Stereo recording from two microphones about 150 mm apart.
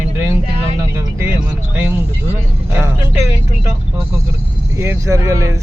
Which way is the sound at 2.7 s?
20° right (ahead or behind).